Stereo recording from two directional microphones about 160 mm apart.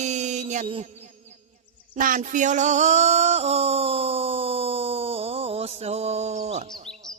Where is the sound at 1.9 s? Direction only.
55° right (ahead or behind).